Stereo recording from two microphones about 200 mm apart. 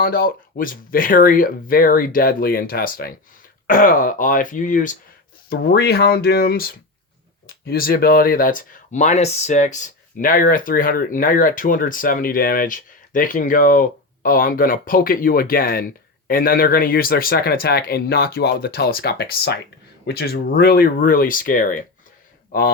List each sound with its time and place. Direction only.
0.0 s speech: 45° left (ahead or behind)
5.5 s speech: 50° left (ahead or behind)